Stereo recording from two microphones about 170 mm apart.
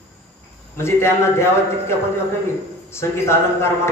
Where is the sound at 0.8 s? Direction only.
15° left (ahead or behind).